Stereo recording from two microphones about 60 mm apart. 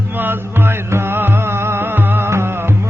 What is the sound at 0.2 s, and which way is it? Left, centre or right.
Music, right.